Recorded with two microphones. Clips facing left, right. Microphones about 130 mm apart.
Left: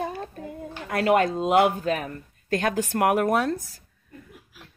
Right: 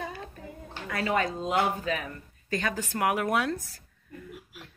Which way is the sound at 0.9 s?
60° left (ahead or behind).